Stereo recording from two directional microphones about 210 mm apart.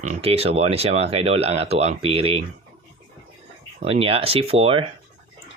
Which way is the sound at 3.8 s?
25° right (ahead or behind).